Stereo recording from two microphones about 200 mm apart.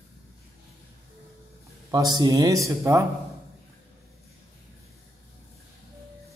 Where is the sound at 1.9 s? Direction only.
20° right (ahead or behind).